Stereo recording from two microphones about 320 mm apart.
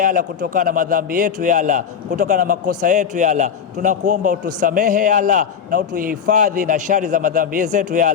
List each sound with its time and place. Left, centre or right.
0.0 s a man's voice: right